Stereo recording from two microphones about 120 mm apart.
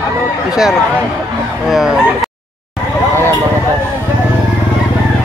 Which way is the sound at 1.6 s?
Centre (ahead or behind).